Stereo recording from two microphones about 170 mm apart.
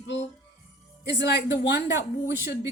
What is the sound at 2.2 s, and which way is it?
Speech, 15° right (ahead or behind).